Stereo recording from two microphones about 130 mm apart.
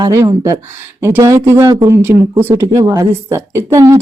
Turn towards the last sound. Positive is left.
turn(degrees=-20)  # may be behind; listen again after turning